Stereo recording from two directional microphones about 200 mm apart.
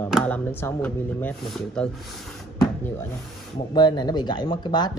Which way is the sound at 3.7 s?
20° left (ahead or behind).